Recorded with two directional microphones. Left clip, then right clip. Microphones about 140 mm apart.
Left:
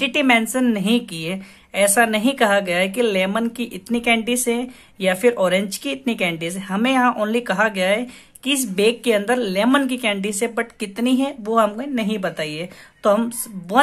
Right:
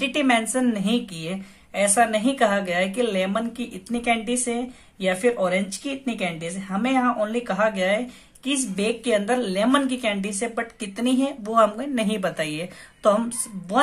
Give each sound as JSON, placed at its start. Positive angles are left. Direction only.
{"t": 0.0, "sound": "a woman's voice", "side_deg": 45}